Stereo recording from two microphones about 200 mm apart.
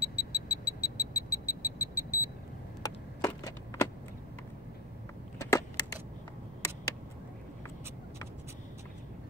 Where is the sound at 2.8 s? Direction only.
15° left (ahead or behind).